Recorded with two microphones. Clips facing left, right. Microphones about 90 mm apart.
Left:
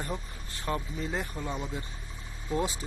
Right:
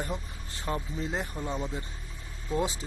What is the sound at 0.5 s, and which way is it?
Speech, 20° right (ahead or behind).